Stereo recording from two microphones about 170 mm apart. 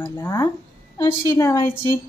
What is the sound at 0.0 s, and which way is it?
A woman's voice, 15° left (ahead or behind).